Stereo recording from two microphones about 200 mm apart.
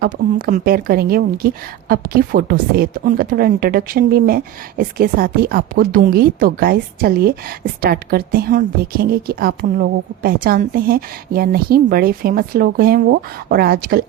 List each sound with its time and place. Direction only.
0.0 s a woman's voice: 45° right (ahead or behind)